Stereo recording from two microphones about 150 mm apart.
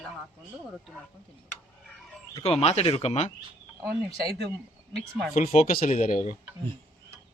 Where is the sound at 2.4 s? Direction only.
45° left (ahead or behind).